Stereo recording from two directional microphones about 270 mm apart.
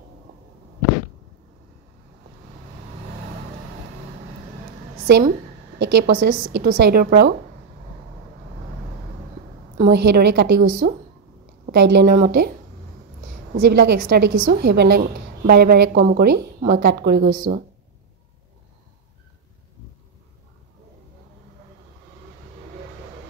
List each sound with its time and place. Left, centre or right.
5.0 s a woman's voice: right
9.8 s a woman's voice: right
13.6 s a woman's voice: right